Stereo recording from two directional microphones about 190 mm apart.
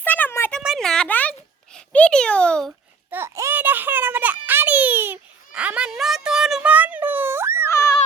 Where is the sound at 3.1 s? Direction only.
10° right (ahead or behind).